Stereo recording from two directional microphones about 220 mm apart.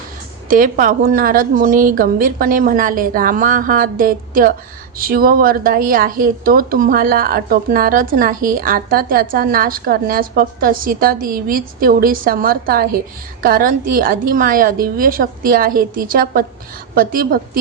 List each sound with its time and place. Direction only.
0.5 s a woman's voice: 40° right (ahead or behind)